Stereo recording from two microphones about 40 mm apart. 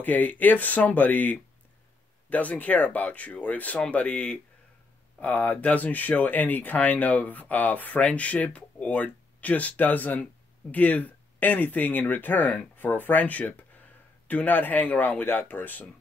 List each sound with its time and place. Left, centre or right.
0.0 s speech: left